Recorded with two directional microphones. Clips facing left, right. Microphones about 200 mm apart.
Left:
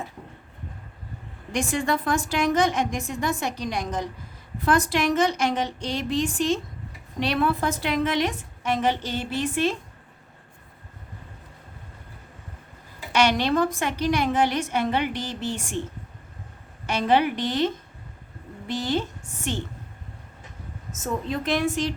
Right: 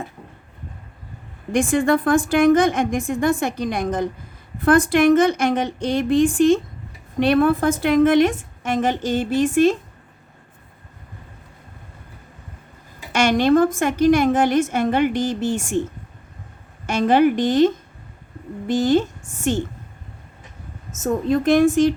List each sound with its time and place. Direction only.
1.5 s a woman's voice: 55° right (ahead or behind)
13.1 s a woman's voice: 50° right (ahead or behind)
16.8 s a woman's voice: 45° right (ahead or behind)
18.7 s a woman's voice: 45° right (ahead or behind)
20.9 s a woman's voice: 45° right (ahead or behind)